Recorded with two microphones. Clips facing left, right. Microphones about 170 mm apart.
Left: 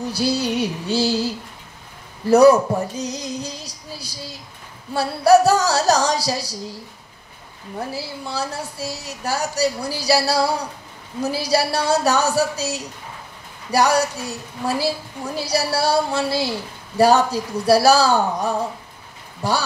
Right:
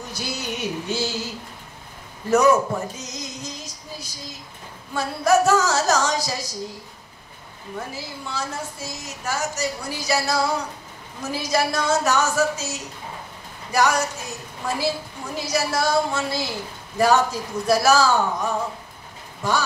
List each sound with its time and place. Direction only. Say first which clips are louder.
0.1 s a woman's voice: left 9 dB; 35° left (ahead or behind)
7.9 s a woman's voice: left 4 dB; 35° left (ahead or behind)